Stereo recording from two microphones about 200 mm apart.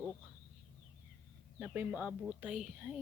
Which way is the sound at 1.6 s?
5° right (ahead or behind).